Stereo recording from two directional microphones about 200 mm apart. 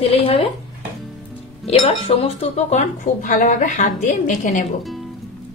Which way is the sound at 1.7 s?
30° left (ahead or behind).